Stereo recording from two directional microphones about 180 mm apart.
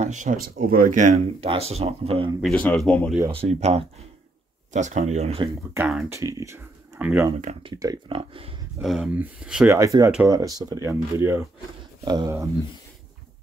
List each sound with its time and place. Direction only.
0.0 s speech: 45° right (ahead or behind)
2.4 s speech: 5° left (ahead or behind)
3.3 s speech: 35° right (ahead or behind)
6.0 s speech: 15° right (ahead or behind)
7.3 s speech: 35° right (ahead or behind)
7.7 s speech: 20° right (ahead or behind)
8.8 s speech: centre (ahead or behind)
9.8 s speech: 15° right (ahead or behind)